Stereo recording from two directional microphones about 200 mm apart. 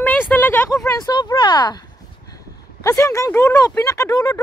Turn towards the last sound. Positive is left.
turn(degrees=15)  # may be behind; listen again after turning